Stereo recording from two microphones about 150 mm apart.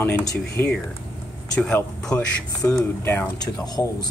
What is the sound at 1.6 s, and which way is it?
Speech, 5° left (ahead or behind).